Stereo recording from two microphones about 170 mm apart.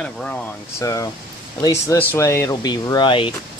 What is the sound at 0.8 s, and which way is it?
Speech, 20° left (ahead or behind).